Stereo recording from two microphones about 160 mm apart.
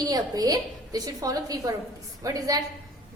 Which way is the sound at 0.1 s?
25° right (ahead or behind).